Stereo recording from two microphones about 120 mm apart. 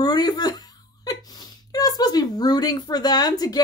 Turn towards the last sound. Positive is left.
turn(degrees=35)  # may be behind; listen again after turning